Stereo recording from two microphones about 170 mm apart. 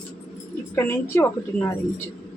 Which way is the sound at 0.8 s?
15° left (ahead or behind).